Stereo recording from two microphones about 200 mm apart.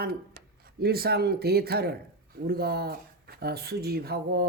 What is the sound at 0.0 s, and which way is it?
Speech, 50° right (ahead or behind).